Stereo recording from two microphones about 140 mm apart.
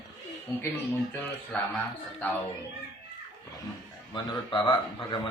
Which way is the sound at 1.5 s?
10° left (ahead or behind).